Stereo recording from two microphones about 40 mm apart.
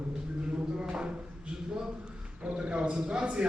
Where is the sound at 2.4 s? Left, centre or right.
Right.